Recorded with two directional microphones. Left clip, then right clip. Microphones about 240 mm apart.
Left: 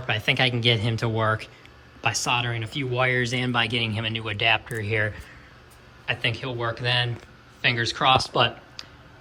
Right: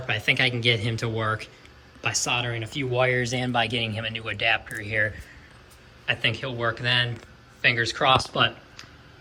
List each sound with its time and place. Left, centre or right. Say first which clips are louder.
0.0 s speech: even; centre
8.3 s speech: left 1 dB; centre